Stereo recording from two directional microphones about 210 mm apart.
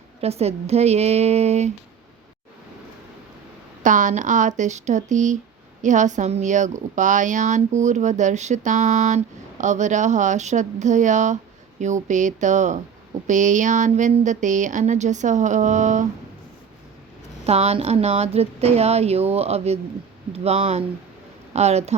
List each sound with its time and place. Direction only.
0.2 s speech: 30° right (ahead or behind)
3.8 s speech: 35° right (ahead or behind)
17.4 s a woman's voice: 30° right (ahead or behind)